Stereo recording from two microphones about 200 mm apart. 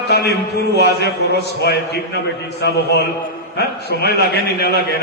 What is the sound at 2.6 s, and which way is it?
A man's voice, 55° left (ahead or behind).